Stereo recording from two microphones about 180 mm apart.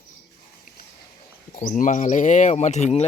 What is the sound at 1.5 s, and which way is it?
Speech, 45° left (ahead or behind).